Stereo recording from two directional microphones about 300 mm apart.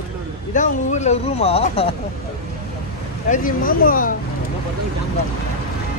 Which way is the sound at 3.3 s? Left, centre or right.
Left.